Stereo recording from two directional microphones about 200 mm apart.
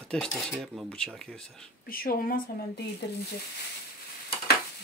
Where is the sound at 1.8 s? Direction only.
45° left (ahead or behind).